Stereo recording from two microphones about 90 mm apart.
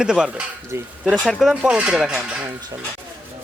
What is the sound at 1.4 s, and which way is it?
Speech, 10° right (ahead or behind).